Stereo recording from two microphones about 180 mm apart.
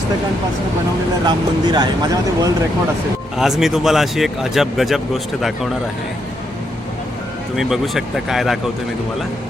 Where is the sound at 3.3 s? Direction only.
Centre (ahead or behind).